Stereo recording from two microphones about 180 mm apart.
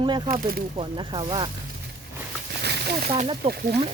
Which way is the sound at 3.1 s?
30° right (ahead or behind).